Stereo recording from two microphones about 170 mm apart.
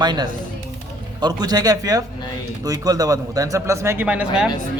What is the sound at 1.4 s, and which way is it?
A man's voice, 25° right (ahead or behind).